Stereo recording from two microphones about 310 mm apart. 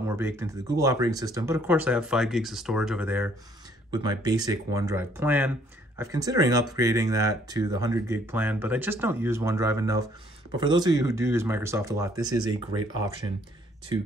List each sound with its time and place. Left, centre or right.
0.1 s speech: centre